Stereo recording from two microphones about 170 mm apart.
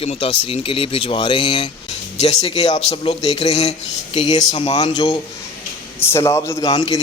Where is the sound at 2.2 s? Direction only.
40° left (ahead or behind).